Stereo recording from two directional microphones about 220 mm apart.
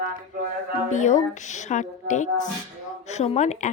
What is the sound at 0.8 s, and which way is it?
Speech, 35° left (ahead or behind).